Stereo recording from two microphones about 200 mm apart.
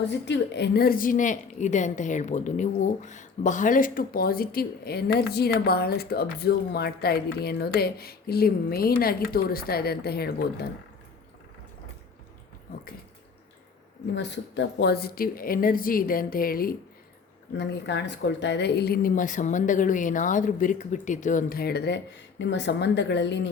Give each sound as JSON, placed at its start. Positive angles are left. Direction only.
{"t": 0.0, "sound": "a woman's voice", "side_deg": 60}
{"t": 14.2, "sound": "a woman's voice", "side_deg": 60}
{"t": 17.6, "sound": "a woman's voice", "side_deg": 60}